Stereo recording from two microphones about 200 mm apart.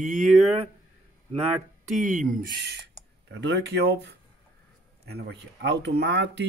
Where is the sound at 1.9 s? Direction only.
40° right (ahead or behind).